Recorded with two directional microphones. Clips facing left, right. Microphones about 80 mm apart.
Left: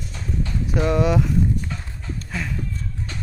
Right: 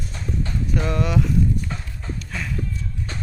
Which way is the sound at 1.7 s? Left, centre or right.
Right.